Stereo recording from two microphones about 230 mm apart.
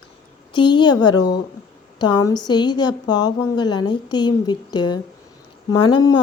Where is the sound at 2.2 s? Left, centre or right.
Centre.